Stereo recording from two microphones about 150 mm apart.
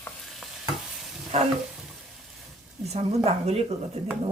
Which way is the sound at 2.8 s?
45° right (ahead or behind).